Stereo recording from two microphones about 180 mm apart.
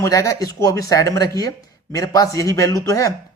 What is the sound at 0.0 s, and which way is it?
Speech, 20° left (ahead or behind).